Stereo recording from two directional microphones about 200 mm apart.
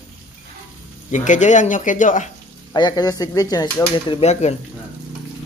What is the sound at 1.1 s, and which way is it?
Speech, 40° left (ahead or behind).